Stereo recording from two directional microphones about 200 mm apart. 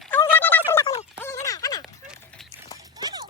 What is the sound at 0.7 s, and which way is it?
Gargling, 10° left (ahead or behind).